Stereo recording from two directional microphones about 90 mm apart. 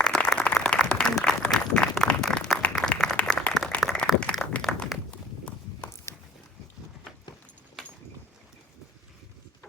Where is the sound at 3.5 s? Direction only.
5° left (ahead or behind).